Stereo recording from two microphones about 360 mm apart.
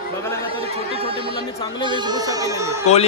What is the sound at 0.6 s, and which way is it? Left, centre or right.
Speech, centre.